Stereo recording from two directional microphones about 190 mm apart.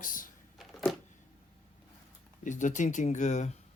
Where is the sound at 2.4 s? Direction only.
40° left (ahead or behind).